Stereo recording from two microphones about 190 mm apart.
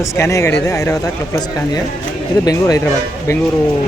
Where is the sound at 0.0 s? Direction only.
15° left (ahead or behind).